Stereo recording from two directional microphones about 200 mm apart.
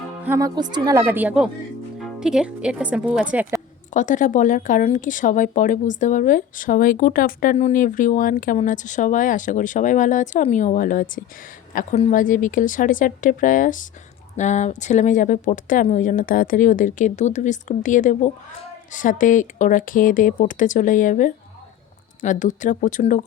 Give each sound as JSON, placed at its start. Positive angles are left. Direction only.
{"t": 0.3, "sound": "speech", "side_deg": -15}
{"t": 3.9, "sound": "a woman's voice", "side_deg": 40}